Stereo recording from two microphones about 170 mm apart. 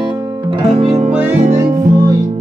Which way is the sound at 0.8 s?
40° right (ahead or behind).